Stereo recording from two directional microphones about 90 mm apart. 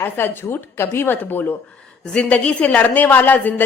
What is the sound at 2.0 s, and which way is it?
A woman's voice, 10° left (ahead or behind).